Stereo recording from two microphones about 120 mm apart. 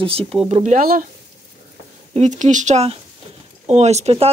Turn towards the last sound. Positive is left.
turn(degrees=-60)  # may be behind; listen again after turning